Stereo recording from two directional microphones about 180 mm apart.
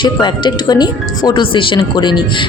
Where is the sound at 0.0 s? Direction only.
25° left (ahead or behind).